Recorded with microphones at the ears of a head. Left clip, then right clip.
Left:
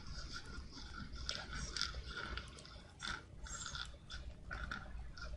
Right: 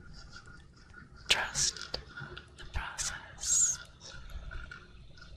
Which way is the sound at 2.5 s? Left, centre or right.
Right.